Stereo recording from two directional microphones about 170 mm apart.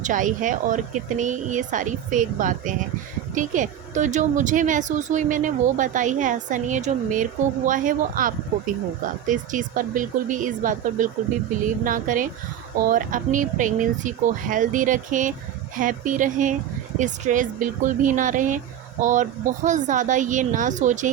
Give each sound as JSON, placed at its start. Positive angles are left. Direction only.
{"t": 0.0, "sound": "a woman's voice", "side_deg": -50}